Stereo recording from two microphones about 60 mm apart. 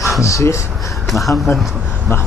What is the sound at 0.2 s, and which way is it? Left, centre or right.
Speech, left.